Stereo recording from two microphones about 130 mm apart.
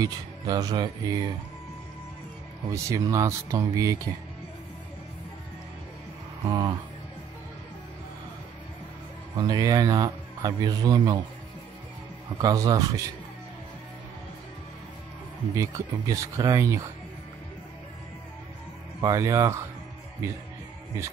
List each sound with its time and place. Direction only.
0.0 s a man's voice: 30° right (ahead or behind)
2.7 s a man's voice: 25° right (ahead or behind)
6.4 s music: 35° right (ahead or behind)
9.4 s a man's voice: 30° right (ahead or behind)
12.4 s a man's voice: 30° right (ahead or behind)
15.5 s a man's voice: 25° right (ahead or behind)
18.9 s a man's voice: 25° right (ahead or behind)